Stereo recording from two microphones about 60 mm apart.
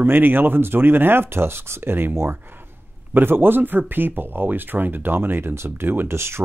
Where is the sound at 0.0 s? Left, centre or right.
Right.